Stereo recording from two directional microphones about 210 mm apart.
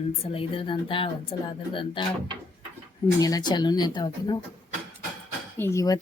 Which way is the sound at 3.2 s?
15° left (ahead or behind).